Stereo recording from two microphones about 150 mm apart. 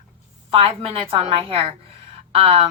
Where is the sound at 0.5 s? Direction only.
40° right (ahead or behind).